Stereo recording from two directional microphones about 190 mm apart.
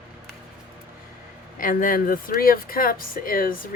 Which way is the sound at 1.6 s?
45° left (ahead or behind).